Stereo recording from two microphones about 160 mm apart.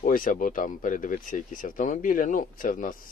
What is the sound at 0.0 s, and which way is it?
Speech, 55° left (ahead or behind).